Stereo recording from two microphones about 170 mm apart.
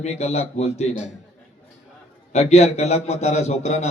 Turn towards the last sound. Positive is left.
turn(degrees=40)  # may be behind; listen again after turning